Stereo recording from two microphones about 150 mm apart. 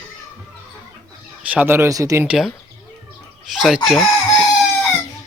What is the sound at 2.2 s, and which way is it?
Speech, 5° right (ahead or behind).